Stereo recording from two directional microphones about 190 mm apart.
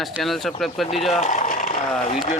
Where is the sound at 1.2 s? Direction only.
40° left (ahead or behind).